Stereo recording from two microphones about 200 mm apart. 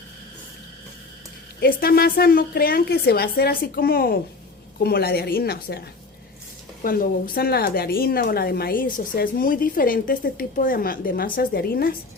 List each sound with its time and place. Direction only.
1.6 s speech: 50° left (ahead or behind)
6.8 s speech: 45° left (ahead or behind)